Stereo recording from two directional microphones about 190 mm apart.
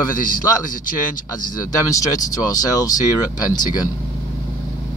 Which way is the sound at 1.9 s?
20° left (ahead or behind).